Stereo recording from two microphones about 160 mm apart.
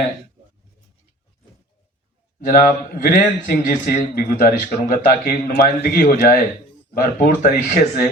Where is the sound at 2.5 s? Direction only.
65° left (ahead or behind).